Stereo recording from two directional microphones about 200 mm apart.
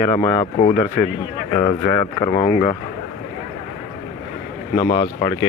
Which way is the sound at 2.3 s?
35° left (ahead or behind).